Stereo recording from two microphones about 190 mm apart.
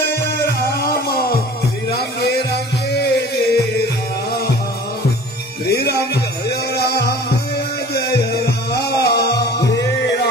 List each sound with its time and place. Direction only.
0.5 s music: 55° left (ahead or behind)
5.7 s music: 55° left (ahead or behind)